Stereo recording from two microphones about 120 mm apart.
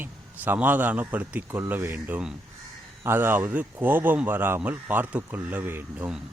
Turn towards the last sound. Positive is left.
turn(degrees=-15)  # may be behind; listen again after turning